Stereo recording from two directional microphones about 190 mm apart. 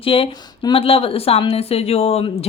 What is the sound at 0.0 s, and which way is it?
A woman's voice, 30° left (ahead or behind).